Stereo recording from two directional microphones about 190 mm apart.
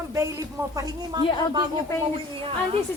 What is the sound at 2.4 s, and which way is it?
Speech, 30° right (ahead or behind).